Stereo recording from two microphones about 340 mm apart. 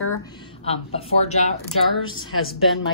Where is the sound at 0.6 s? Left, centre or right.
Centre.